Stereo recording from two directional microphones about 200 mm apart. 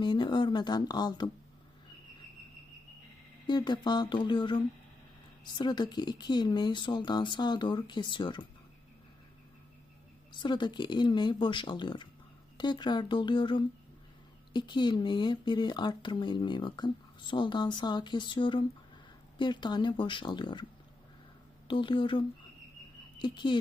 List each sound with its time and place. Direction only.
0.0 s speech: 25° left (ahead or behind)
3.4 s speech: 20° left (ahead or behind)
10.4 s speech: 25° left (ahead or behind)
21.7 s speech: 25° left (ahead or behind)